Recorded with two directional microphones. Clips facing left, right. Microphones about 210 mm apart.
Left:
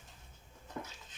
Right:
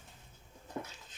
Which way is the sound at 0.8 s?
35° right (ahead or behind).